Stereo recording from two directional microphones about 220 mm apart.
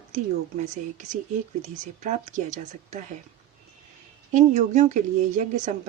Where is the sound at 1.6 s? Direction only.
35° right (ahead or behind).